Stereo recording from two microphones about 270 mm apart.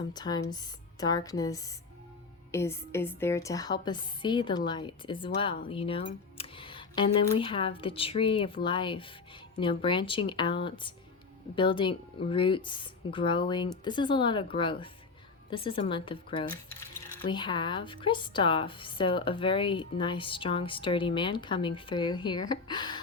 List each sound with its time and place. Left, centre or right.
0.1 s a woman's voice: centre